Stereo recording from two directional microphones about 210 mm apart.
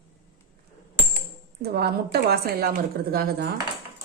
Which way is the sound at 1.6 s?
50° right (ahead or behind).